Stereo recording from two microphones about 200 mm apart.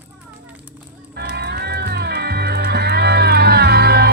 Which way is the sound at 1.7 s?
55° right (ahead or behind).